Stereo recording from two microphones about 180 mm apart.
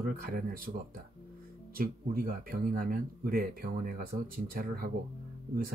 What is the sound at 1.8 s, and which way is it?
Speech, 55° right (ahead or behind).